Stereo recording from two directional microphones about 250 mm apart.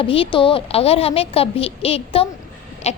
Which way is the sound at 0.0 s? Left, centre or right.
Left.